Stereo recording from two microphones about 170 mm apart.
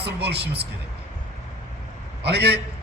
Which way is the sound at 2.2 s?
75° right (ahead or behind).